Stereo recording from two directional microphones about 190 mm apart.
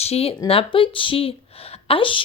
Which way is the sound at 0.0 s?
30° left (ahead or behind).